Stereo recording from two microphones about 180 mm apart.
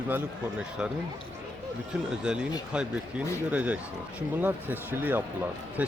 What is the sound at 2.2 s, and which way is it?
Speech, 5° right (ahead or behind).